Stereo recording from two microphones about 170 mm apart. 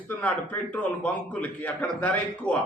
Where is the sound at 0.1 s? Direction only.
10° left (ahead or behind).